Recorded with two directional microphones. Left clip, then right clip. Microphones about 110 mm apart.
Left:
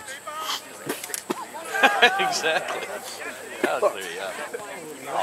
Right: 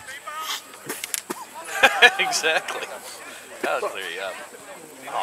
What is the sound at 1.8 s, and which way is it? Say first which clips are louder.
Speech: right 2 dB; 25° right (ahead or behind).